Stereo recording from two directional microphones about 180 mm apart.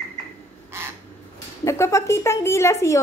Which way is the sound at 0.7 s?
15° right (ahead or behind).